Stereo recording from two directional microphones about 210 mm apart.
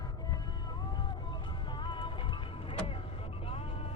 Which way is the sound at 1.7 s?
20° left (ahead or behind).